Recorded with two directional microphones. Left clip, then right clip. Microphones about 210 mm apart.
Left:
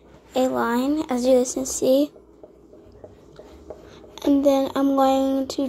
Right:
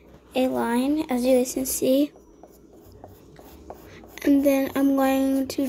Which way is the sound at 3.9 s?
15° right (ahead or behind).